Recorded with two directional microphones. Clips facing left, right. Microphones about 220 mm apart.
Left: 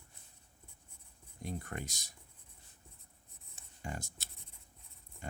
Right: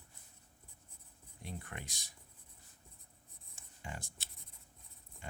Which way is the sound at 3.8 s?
40° left (ahead or behind).